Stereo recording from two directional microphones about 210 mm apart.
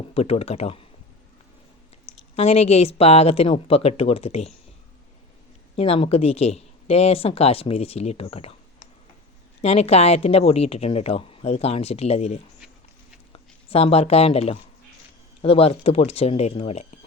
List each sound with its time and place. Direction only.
0.1 s a woman's voice: 30° left (ahead or behind)
2.3 s a woman's voice: 30° left (ahead or behind)
5.7 s a woman's voice: 30° left (ahead or behind)
9.6 s a woman's voice: 30° left (ahead or behind)
13.7 s a woman's voice: 25° left (ahead or behind)